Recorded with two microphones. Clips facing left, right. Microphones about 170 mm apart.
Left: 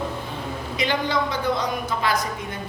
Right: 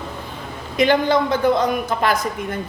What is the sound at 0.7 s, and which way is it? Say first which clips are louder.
A man's voice: right 8 dB; 50° right (ahead or behind).